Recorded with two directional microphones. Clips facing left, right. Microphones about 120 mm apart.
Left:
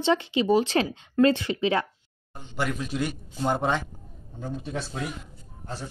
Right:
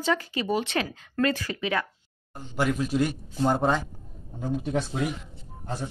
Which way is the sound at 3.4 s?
5° right (ahead or behind).